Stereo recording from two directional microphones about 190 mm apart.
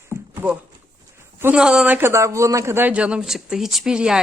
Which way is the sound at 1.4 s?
5° right (ahead or behind).